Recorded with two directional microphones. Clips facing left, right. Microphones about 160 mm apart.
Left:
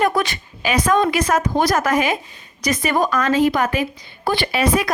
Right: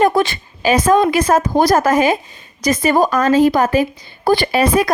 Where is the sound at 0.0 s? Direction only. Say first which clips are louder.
Right 5 dB; 30° right (ahead or behind).